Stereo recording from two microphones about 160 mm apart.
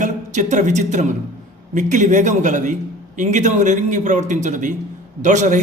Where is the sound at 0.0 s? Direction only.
50° right (ahead or behind).